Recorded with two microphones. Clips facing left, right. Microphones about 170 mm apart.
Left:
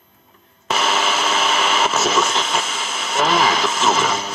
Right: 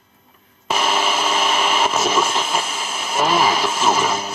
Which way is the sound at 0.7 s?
10° right (ahead or behind).